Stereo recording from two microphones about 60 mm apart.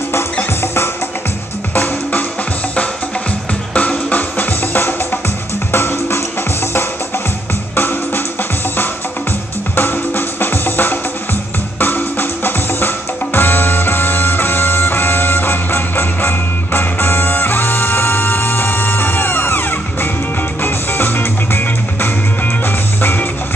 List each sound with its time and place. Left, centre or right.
3.7 s music: left
5.7 s music: left
7.7 s music: left
9.8 s music: left